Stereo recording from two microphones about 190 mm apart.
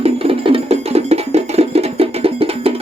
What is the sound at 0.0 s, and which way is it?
Music, 30° right (ahead or behind).